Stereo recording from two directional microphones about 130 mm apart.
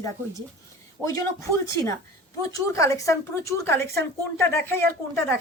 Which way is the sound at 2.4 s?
25° left (ahead or behind).